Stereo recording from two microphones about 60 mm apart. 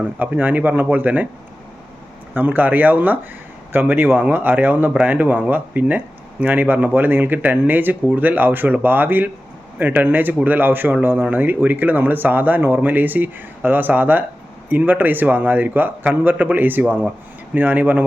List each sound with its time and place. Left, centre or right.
0.2 s speech: right
2.3 s speech: right